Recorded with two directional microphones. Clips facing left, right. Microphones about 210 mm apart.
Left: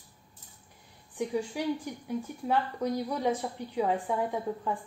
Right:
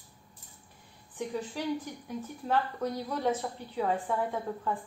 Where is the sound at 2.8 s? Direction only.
10° left (ahead or behind).